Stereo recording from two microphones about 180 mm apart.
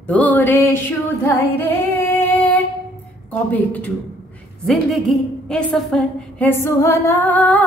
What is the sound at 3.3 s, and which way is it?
A woman's voice, 10° left (ahead or behind).